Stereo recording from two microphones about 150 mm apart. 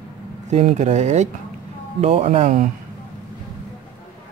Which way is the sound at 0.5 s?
50° right (ahead or behind).